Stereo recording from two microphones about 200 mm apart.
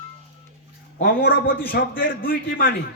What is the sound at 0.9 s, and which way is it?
Speech, 50° left (ahead or behind).